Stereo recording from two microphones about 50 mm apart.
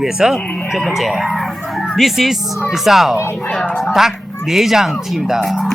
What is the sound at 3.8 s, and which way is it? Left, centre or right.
Speech, centre.